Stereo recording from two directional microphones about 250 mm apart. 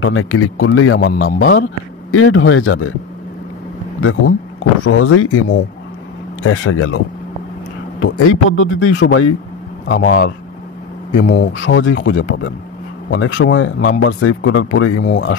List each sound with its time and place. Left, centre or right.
0.0 s speech: left
4.0 s speech: left
8.0 s speech: left